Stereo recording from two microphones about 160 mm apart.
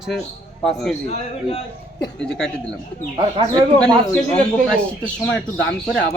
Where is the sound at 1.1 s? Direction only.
40° left (ahead or behind).